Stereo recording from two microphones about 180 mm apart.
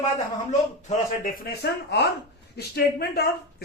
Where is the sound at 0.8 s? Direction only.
50° left (ahead or behind).